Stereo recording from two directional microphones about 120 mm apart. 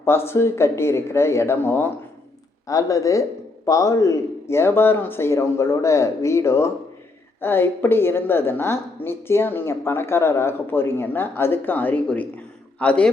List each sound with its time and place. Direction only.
0.0 s a woman's voice: 20° left (ahead or behind)